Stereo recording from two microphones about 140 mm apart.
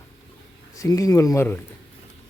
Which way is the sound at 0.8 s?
25° left (ahead or behind).